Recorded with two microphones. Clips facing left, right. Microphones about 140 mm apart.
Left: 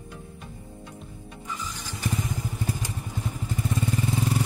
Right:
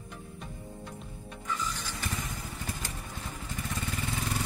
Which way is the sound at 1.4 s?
15° left (ahead or behind).